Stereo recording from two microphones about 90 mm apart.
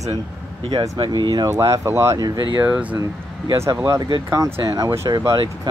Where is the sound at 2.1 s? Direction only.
50° right (ahead or behind).